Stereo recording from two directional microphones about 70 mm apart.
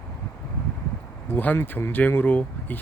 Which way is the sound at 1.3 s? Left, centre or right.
Left.